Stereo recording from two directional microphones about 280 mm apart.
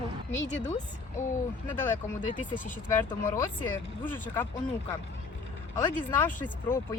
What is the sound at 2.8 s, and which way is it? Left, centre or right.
A woman's voice, centre.